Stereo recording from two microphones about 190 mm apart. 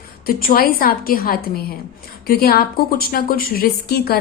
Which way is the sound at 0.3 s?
50° left (ahead or behind).